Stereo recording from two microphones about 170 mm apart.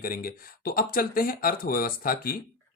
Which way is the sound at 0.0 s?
60° left (ahead or behind).